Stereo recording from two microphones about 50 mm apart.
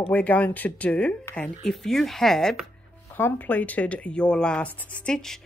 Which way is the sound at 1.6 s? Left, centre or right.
Centre.